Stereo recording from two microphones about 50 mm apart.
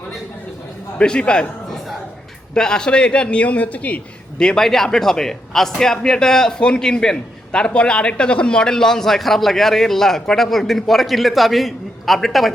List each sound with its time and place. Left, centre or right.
0.9 s a man's voice: left
2.6 s a man's voice: centre; by 4.0 s left
4.4 s a man's voice: centre